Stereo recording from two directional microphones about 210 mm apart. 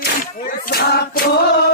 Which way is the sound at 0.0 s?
45° left (ahead or behind).